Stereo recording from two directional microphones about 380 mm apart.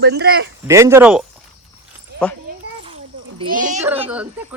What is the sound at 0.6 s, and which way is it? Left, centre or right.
Speech, centre.